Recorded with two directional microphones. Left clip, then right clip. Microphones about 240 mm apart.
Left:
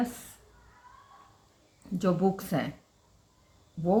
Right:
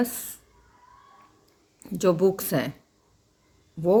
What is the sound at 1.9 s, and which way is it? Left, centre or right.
Speech, right.